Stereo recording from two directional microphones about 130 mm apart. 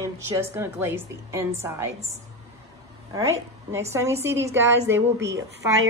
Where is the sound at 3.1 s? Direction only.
25° right (ahead or behind).